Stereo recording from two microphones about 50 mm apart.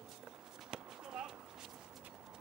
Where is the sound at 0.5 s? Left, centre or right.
Centre.